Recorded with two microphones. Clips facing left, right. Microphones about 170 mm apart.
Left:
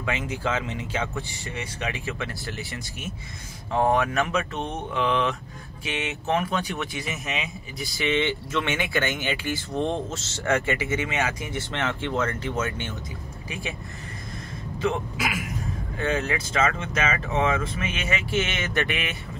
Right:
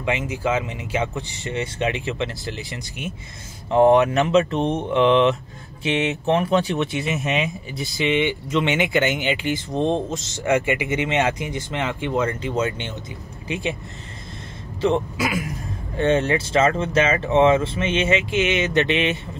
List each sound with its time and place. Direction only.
0.0 s speech: 10° right (ahead or behind)
1.5 s speech: 25° right (ahead or behind)
16.0 s speech: 30° right (ahead or behind)